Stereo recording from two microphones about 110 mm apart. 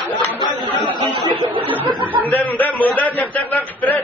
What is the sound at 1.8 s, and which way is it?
Speech, 50° right (ahead or behind).